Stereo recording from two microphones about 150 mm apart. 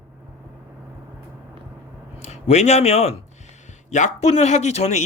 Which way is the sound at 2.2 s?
50° left (ahead or behind).